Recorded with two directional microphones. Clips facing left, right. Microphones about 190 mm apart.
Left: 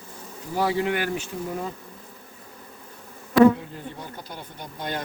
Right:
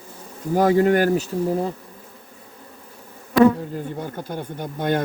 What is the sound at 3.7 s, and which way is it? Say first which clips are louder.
Speech: right 8 dB; 50° right (ahead or behind).